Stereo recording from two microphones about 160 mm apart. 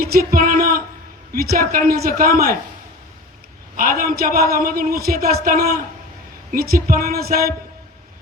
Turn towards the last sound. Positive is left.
turn(degrees=-70)  # may be behind; listen again after turning